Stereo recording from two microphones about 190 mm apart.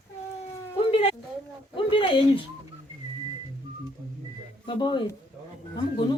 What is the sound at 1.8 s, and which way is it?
Speech, 25° left (ahead or behind).